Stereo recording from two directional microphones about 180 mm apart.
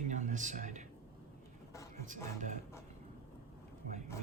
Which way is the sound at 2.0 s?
45° right (ahead or behind).